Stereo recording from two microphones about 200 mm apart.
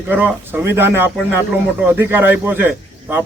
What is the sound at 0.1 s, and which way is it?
A man's voice, 10° right (ahead or behind).